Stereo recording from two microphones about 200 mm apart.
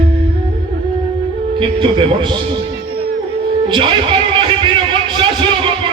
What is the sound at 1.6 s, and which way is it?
Speech, 25° right (ahead or behind).